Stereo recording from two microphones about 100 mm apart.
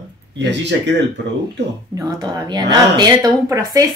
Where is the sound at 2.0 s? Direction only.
40° right (ahead or behind).